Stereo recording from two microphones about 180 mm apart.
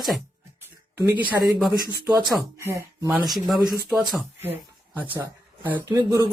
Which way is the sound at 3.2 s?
Centre (ahead or behind).